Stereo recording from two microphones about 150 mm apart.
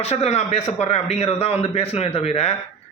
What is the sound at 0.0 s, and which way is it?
A man's voice, 45° left (ahead or behind).